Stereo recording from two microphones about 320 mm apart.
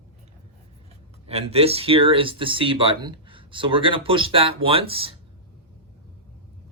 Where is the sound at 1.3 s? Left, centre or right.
Centre.